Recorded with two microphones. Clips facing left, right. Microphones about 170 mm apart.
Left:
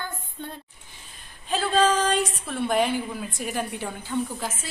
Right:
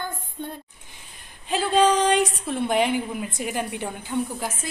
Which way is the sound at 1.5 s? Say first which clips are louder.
Right 2 dB; 15° right (ahead or behind).